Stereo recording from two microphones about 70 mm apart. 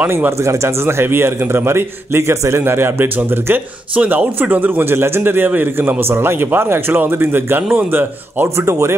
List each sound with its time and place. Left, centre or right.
0.4 s a man's voice: right
3.9 s a man's voice: right
8.5 s speech: right